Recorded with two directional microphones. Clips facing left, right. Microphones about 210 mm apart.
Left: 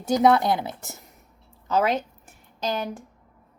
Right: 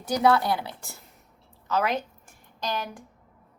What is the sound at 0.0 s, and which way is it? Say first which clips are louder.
A woman's voice: left 3 dB; 20° left (ahead or behind).